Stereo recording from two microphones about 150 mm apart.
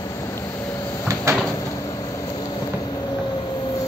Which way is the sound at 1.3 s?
20° right (ahead or behind).